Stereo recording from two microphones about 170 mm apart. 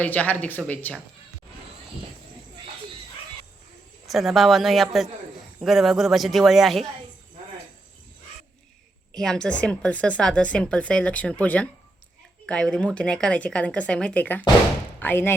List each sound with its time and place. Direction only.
0.0 s speech: 10° left (ahead or behind)
4.0 s speech: centre (ahead or behind)
9.1 s speech: 5° left (ahead or behind)